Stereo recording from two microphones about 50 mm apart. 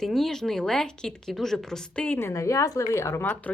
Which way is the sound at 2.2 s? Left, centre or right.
Left.